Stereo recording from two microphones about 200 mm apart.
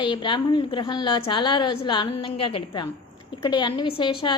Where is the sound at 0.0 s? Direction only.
25° left (ahead or behind).